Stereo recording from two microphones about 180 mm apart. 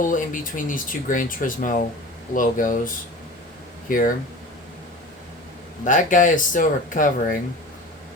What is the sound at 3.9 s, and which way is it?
Speech, 50° left (ahead or behind).